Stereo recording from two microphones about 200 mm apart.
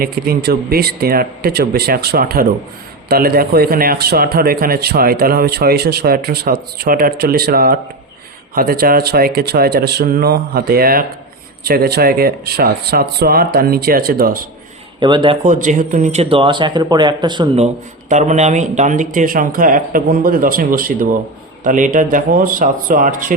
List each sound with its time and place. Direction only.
0.0 s speech: 50° right (ahead or behind)
15.0 s speech: 25° right (ahead or behind)
15.4 s speech: 40° right (ahead or behind); by 17.7 s 25° right (ahead or behind)
18.1 s speech: 35° right (ahead or behind)